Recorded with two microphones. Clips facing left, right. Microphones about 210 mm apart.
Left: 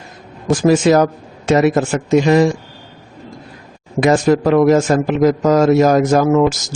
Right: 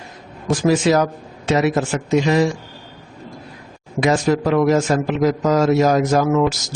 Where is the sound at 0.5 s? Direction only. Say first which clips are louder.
Left 4 dB; 50° left (ahead or behind).